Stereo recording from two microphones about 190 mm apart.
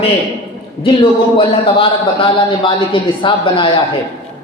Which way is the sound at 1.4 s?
25° left (ahead or behind).